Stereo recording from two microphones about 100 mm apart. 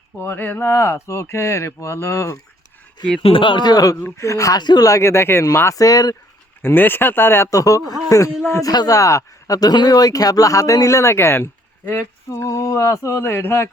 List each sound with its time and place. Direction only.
0.2 s speech: 20° left (ahead or behind)
3.2 s speech: 60° left (ahead or behind); by 6.1 s 40° left (ahead or behind)
6.6 s speech: 20° left (ahead or behind)